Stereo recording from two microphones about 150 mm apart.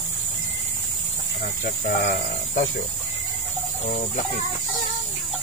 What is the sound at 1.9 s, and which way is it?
Speech, 65° left (ahead or behind).